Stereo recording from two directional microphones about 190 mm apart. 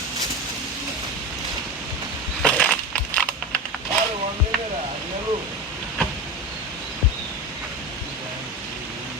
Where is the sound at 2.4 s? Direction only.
5° left (ahead or behind).